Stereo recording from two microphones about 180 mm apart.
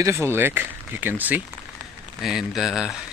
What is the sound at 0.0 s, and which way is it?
Speech, 15° right (ahead or behind).